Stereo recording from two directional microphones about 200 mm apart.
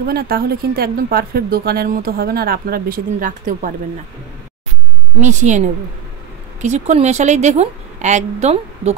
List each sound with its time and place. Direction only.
0.0 s speech: 50° right (ahead or behind)
5.2 s a woman's voice: 35° right (ahead or behind)
6.6 s a woman's voice: 35° right (ahead or behind)